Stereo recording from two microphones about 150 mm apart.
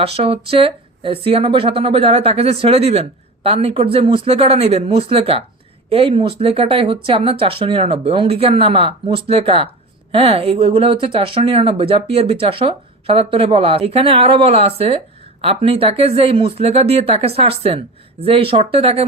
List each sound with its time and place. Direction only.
0.0 s speech: 40° right (ahead or behind)